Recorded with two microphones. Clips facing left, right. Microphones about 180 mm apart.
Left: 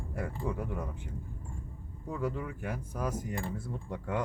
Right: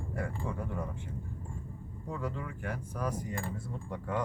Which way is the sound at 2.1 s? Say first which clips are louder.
Left 3 dB; 5° left (ahead or behind).